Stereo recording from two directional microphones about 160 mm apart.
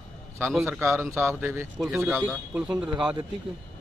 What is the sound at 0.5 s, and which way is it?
Speech, centre (ahead or behind).